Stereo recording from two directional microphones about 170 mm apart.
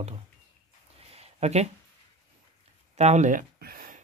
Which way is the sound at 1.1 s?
40° right (ahead or behind).